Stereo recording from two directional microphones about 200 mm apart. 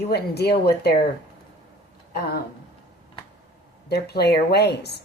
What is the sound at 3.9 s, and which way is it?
Speech, 55° left (ahead or behind).